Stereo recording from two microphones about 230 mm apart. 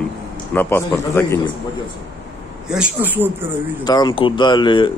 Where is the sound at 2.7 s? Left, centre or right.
Centre.